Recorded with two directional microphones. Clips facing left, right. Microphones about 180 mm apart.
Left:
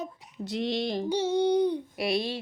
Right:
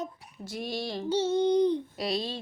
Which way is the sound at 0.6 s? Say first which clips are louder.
Left 5 dB; 65° left (ahead or behind).